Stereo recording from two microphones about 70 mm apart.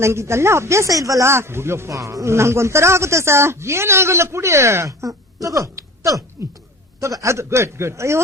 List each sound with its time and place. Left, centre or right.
0.0 s speech: right
1.3 s speech: right
5.0 s a man's voice: right